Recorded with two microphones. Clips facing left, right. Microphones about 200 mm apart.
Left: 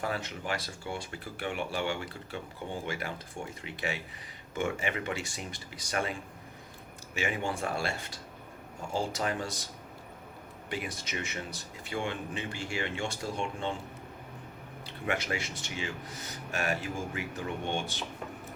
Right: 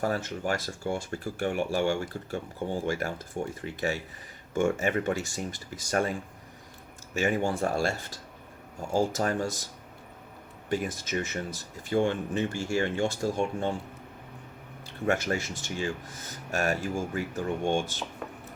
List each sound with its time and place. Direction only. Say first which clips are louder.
0.0 s speech: right 6 dB; 40° right (ahead or behind)
10.7 s speech: right 7 dB; 45° right (ahead or behind)
15.0 s speech: right 6 dB; 45° right (ahead or behind)